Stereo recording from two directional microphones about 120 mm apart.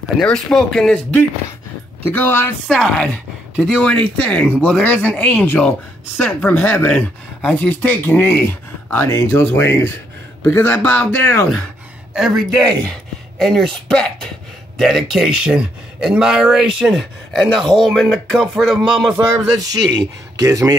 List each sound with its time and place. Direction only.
0.2 s speech: 5° left (ahead or behind)
2.1 s speech: 20° left (ahead or behind)
2.7 s speech: 5° left (ahead or behind)
3.8 s speech: 10° left (ahead or behind)
12.1 s speech: 5° right (ahead or behind)
19.1 s speech: 30° right (ahead or behind)